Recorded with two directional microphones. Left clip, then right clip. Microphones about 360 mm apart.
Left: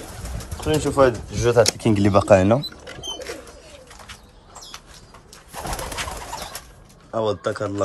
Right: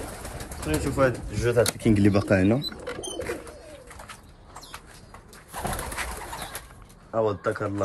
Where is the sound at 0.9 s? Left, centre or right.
Centre.